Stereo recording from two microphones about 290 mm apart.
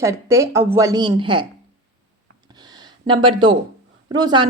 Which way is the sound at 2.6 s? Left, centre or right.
Centre.